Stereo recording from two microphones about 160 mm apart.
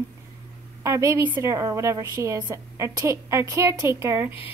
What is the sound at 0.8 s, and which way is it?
A woman's voice, 20° right (ahead or behind).